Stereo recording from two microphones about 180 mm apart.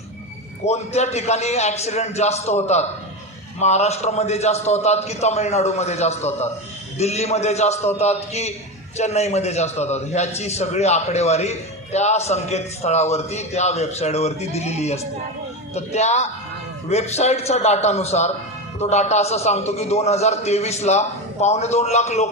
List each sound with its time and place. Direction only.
0.6 s a man's voice: 35° left (ahead or behind)